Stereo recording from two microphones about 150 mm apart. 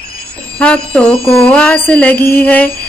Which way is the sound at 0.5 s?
5° left (ahead or behind).